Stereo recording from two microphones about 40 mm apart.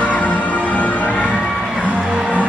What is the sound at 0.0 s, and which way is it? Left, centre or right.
Music, left.